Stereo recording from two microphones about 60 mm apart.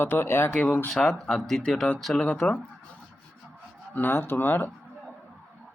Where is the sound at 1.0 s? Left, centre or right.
Centre.